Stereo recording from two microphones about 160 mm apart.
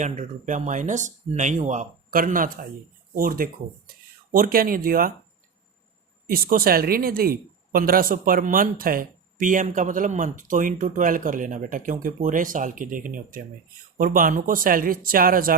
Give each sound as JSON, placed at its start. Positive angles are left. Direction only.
{"t": 0.0, "sound": "speech", "side_deg": -50}
{"t": 6.2, "sound": "speech", "side_deg": -65}